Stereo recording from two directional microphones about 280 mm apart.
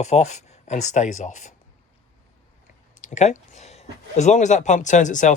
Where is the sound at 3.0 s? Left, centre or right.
Left.